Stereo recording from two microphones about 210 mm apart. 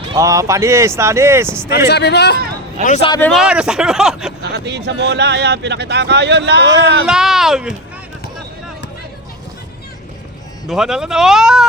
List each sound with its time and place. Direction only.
0.1 s speech: 15° right (ahead or behind)
1.9 s speech: 55° left (ahead or behind)
2.8 s speech: 35° left (ahead or behind)
3.1 s speech: 10° left (ahead or behind)
3.3 s speech: 5° right (ahead or behind)
4.5 s speech: 50° right (ahead or behind)
7.1 s speech: centre (ahead or behind)
10.7 s speech: centre (ahead or behind)